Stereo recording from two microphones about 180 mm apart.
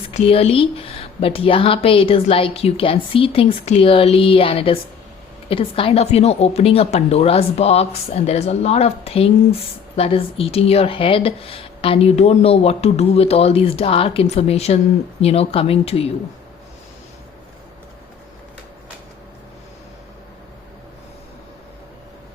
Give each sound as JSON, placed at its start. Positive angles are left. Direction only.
{"t": 0.1, "sound": "speech", "side_deg": 35}